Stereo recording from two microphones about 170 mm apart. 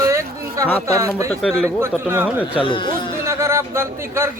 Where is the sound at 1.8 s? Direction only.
15° right (ahead or behind).